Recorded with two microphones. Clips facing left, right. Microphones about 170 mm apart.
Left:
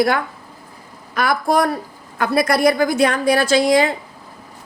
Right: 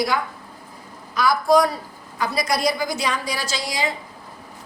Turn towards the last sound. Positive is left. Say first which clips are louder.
# left 12 dB
turn(degrees=55)  # may be behind; listen again after turning